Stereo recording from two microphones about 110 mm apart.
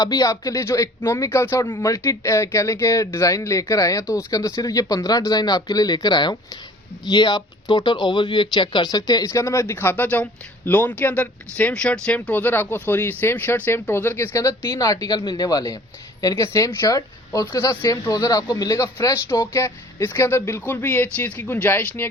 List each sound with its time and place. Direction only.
0.0 s speech: 35° left (ahead or behind); by 22.0 s 20° left (ahead or behind)